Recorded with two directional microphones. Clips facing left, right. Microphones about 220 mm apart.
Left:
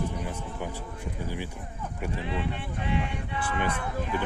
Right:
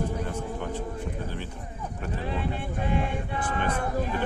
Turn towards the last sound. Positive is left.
turn(degrees=-45)  # may be behind; listen again after turning